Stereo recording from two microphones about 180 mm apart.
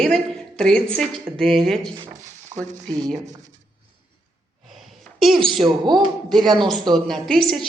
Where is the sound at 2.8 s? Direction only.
20° right (ahead or behind).